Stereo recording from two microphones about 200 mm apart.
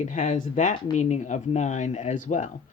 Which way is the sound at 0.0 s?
40° left (ahead or behind).